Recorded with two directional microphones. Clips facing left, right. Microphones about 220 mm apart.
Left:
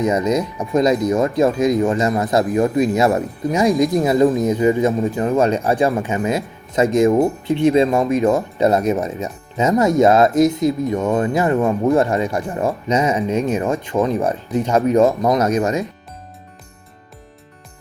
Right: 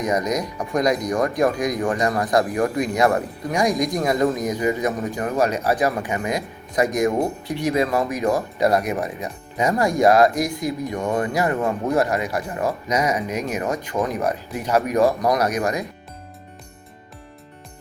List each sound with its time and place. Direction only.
0.0 s a man's voice: 30° left (ahead or behind)